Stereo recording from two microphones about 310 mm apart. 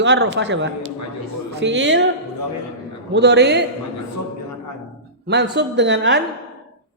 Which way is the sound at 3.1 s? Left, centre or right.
Right.